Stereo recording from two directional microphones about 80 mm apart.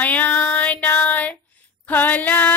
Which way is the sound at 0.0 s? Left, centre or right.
Left.